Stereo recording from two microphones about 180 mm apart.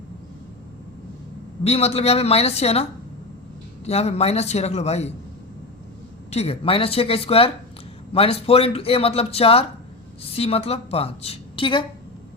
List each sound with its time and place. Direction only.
1.6 s speech: 35° left (ahead or behind)
3.8 s speech: 35° left (ahead or behind)
6.3 s speech: 35° left (ahead or behind)